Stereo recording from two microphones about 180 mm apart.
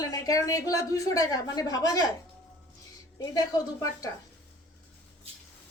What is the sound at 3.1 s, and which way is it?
Speech, 20° left (ahead or behind).